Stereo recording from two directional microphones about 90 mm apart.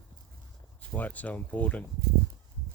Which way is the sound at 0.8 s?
15° left (ahead or behind).